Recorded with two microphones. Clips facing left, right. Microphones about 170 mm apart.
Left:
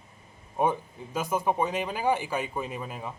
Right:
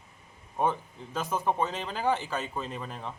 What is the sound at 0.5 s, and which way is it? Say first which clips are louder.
Speech: left 2 dB; 10° left (ahead or behind).